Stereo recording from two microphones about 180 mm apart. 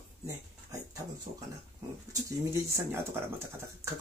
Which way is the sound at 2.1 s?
15° right (ahead or behind).